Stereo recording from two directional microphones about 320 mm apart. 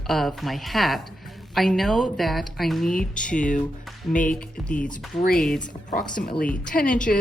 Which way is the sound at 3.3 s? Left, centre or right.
Left.